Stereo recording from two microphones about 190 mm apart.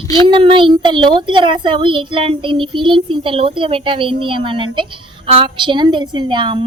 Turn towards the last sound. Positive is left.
turn(degrees=-25)  # may be behind; listen again after turning